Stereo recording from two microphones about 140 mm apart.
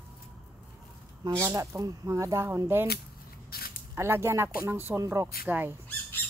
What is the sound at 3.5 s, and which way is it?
Speech, 90° left.